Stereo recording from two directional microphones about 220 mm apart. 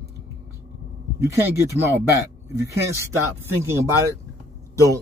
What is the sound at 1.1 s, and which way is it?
Speech, 15° right (ahead or behind).